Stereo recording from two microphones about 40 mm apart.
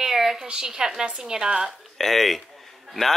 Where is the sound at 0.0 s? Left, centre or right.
Centre.